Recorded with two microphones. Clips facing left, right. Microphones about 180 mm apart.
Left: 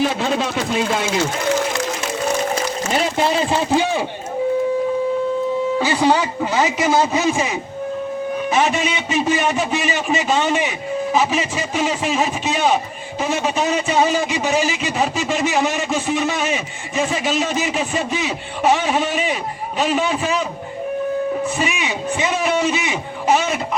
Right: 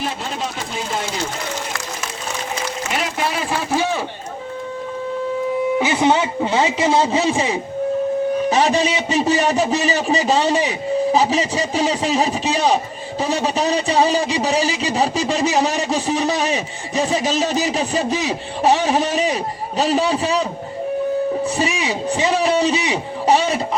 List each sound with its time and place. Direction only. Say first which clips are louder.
0.0 s a sound: left 6 dB; 75° left (ahead or behind)
2.9 s speech: left 5 dB; 30° left (ahead or behind)
5.8 s a man's voice: even; 20° right (ahead or behind); by 20.4 s 35° right (ahead or behind)
21.4 s a man's voice: right 1 dB; 35° right (ahead or behind)